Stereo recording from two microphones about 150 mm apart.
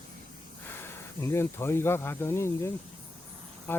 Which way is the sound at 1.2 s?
15° left (ahead or behind).